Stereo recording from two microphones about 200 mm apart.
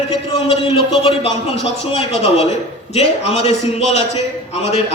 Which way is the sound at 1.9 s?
30° left (ahead or behind).